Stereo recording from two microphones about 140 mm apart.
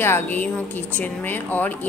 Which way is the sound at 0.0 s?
15° left (ahead or behind).